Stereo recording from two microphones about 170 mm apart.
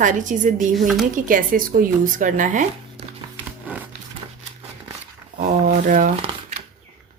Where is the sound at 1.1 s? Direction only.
55° right (ahead or behind).